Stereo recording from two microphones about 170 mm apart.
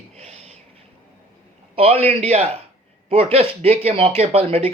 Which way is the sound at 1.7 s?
35° right (ahead or behind).